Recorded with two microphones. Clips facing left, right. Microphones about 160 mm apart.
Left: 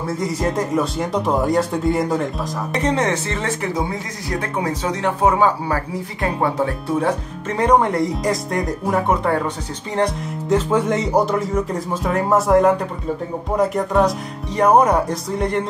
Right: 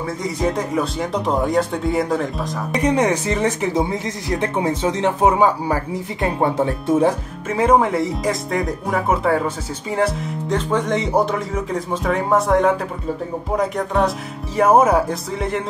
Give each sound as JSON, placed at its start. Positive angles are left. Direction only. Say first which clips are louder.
{"t": 0.2, "sound": "speech", "louder": "even", "side_deg": 0}
{"t": 2.8, "sound": "a woman's voice", "louder": "right 2 dB", "side_deg": -15}
{"t": 7.4, "sound": "speech", "louder": "even", "side_deg": -5}